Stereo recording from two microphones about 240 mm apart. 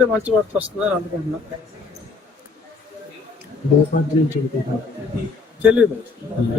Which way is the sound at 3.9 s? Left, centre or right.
Left.